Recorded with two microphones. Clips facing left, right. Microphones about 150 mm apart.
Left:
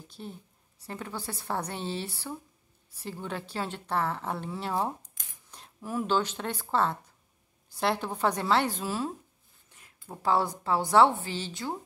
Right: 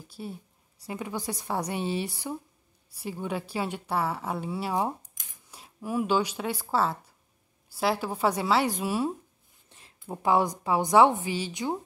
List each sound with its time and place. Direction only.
0.1 s a woman's voice: 10° right (ahead or behind)
9.7 s a sound: 25° right (ahead or behind)
9.9 s a woman's voice: 20° right (ahead or behind)